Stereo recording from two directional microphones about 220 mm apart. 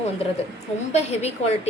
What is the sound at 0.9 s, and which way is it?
Speech, 30° left (ahead or behind).